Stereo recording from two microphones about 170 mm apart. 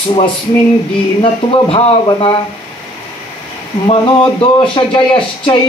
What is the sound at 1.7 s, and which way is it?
Speech, 35° left (ahead or behind).